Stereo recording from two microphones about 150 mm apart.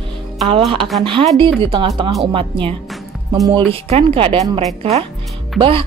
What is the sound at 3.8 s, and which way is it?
Speech, 40° right (ahead or behind).